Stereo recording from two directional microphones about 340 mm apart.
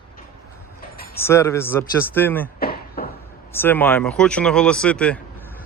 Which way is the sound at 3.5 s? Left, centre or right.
Centre.